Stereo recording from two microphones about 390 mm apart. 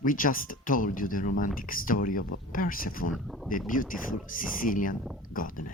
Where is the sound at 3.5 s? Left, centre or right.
Left.